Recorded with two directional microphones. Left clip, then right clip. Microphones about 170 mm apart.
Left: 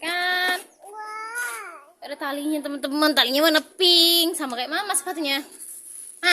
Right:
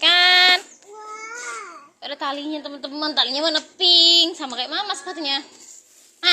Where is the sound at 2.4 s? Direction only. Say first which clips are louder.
Left 3 dB; 60° left (ahead or behind); by 4.0 s 85° left.